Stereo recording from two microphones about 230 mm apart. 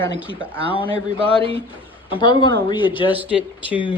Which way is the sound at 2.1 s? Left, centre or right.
Centre.